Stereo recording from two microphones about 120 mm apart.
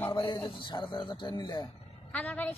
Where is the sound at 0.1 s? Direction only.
40° left (ahead or behind).